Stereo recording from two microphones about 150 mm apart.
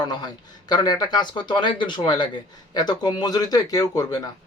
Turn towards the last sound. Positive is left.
turn(degrees=25)  # may be behind; listen again after turning